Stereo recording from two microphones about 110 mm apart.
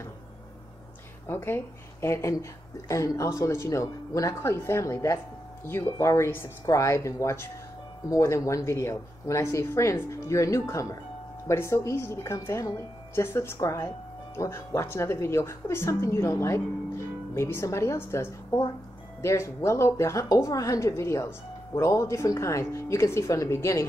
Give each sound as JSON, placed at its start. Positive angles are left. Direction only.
{"t": 1.2, "sound": "speech", "side_deg": 20}